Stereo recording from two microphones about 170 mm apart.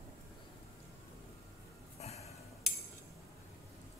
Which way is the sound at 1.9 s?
40° left (ahead or behind).